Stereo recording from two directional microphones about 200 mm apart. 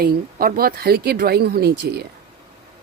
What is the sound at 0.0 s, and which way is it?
Speech, 45° right (ahead or behind).